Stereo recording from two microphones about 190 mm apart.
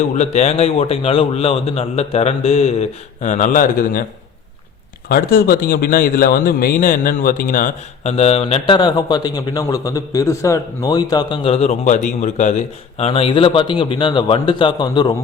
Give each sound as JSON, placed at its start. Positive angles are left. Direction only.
{"t": 0.0, "sound": "speech", "side_deg": 35}
{"t": 5.0, "sound": "speech", "side_deg": 50}
{"t": 8.1, "sound": "a man's voice", "side_deg": 35}